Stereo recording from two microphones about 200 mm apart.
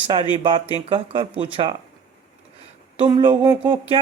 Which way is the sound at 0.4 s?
25° right (ahead or behind).